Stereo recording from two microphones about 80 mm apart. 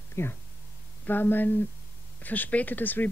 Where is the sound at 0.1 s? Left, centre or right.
Left.